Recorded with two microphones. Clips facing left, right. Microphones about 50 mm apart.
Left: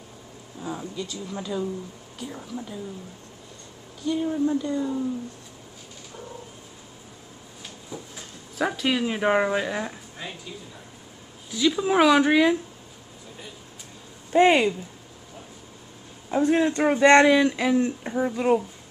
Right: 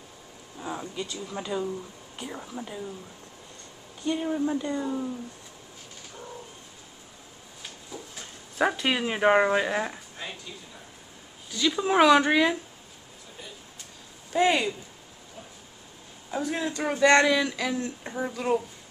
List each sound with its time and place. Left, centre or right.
0.6 s speech: centre
4.3 s speech: centre
7.9 s a sound: centre
8.5 s speech: centre
10.1 s a sound: centre
11.5 s speech: centre
14.3 s speech: left
16.3 s speech: left